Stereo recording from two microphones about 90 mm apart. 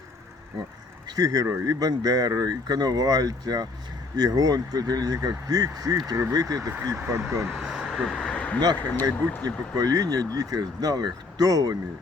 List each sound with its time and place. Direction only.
1.0 s speech: 45° right (ahead or behind)
7.5 s vehicle: 5° right (ahead or behind); by 8.6 s 15° left (ahead or behind)
9.4 s speech: 45° right (ahead or behind)